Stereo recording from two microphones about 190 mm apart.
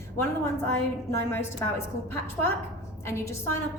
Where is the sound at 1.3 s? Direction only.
10° left (ahead or behind).